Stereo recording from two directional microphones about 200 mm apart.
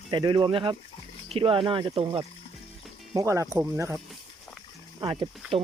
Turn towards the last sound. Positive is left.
turn(degrees=-25)  # may be behind; listen again after turning